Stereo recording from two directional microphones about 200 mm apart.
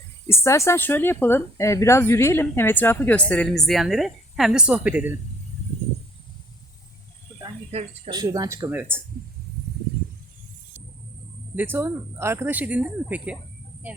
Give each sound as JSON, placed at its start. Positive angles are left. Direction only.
{"t": 0.3, "sound": "a woman's voice", "side_deg": 15}
{"t": 7.4, "sound": "cricket", "side_deg": -30}
{"t": 8.1, "sound": "speech", "side_deg": -20}
{"t": 11.5, "sound": "speech", "side_deg": -10}